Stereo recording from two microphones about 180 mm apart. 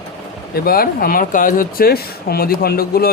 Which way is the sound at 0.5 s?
55° left (ahead or behind).